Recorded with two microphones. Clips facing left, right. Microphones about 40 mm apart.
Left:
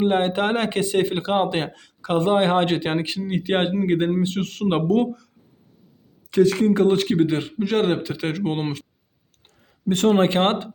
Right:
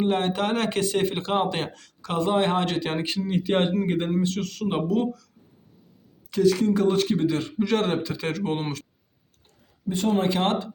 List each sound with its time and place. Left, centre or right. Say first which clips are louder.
0.0 s speech: left 4 dB; left
4.4 s speech: left 5 dB; left
6.3 s speech: left 3 dB; left
7.6 s speech: left 3 dB; centre
9.9 s speech: left 6 dB; left
10.2 s speech: left 4 dB; left